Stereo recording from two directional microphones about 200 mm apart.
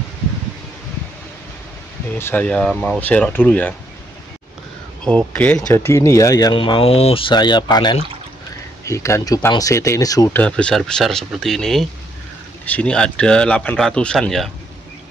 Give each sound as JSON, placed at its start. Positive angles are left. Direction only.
{"t": 2.1, "sound": "speech", "side_deg": 10}
{"t": 5.0, "sound": "speech", "side_deg": 5}